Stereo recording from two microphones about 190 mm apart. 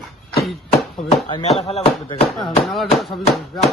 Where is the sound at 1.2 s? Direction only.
35° left (ahead or behind).